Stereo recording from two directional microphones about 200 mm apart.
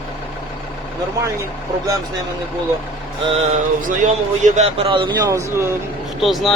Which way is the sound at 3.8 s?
40° right (ahead or behind).